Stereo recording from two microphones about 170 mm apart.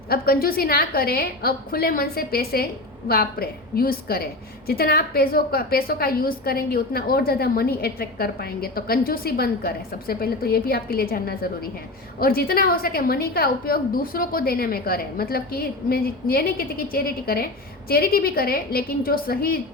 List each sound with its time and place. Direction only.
0.1 s a woman's voice: 60° left (ahead or behind)